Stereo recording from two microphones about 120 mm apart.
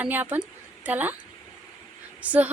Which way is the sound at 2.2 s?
10° right (ahead or behind).